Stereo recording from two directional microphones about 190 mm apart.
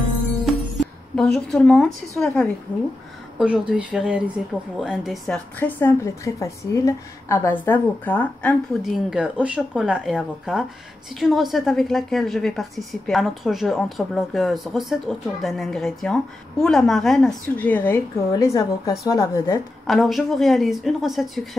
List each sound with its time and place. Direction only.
0.5 s music: centre (ahead or behind)
1.1 s a woman's voice: 5° left (ahead or behind)
19.9 s a woman's voice: centre (ahead or behind)